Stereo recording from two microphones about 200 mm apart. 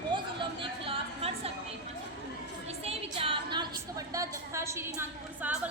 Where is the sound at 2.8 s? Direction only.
30° right (ahead or behind).